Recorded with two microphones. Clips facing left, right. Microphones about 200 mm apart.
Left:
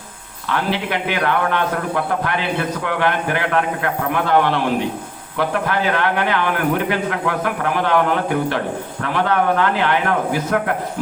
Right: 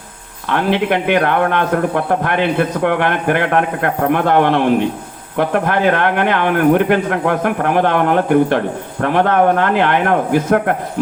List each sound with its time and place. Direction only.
0.4 s speech: 55° right (ahead or behind)